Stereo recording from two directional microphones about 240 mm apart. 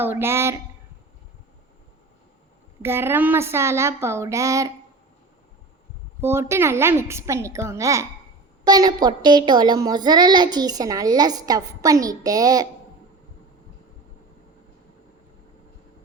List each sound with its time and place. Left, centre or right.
0.0 s a child's voice: centre
2.8 s a child's voice: centre
6.2 s a child's voice: centre